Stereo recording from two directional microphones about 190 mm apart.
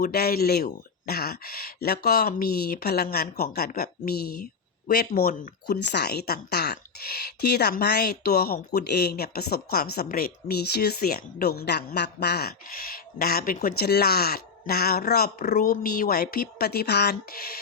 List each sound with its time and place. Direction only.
0.0 s speech: 55° left (ahead or behind)